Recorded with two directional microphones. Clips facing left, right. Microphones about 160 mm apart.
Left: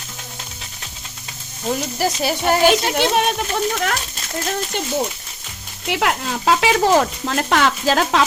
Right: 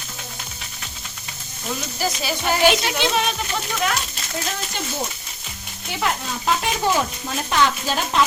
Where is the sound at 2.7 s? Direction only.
50° left (ahead or behind).